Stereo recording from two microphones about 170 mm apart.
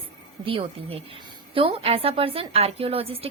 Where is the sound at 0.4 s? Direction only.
30° right (ahead or behind).